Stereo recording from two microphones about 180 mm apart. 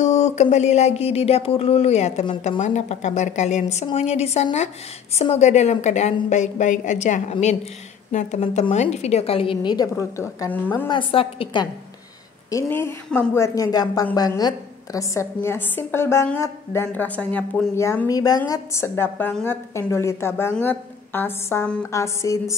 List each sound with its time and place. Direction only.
0.0 s a sound: 40° left (ahead or behind)
8.9 s a woman's voice: 35° left (ahead or behind); by 10.9 s 15° left (ahead or behind)
10.9 s a woman's voice: 30° left (ahead or behind)
12.4 s a woman's voice: 15° left (ahead or behind)